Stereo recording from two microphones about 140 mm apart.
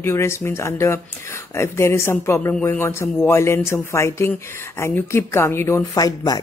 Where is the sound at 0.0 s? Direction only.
20° left (ahead or behind).